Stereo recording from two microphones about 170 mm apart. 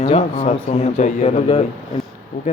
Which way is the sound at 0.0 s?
40° left (ahead or behind).